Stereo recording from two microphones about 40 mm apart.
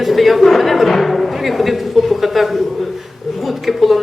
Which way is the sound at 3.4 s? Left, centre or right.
Centre.